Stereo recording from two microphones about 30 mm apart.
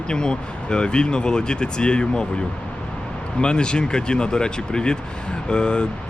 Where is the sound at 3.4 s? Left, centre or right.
Left.